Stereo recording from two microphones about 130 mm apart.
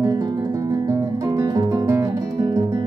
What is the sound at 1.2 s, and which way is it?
Music, 25° right (ahead or behind).